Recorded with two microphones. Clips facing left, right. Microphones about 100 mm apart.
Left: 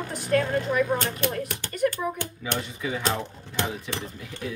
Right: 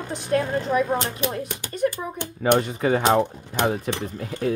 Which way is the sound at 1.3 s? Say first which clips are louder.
Right 1 dB; 20° right (ahead or behind).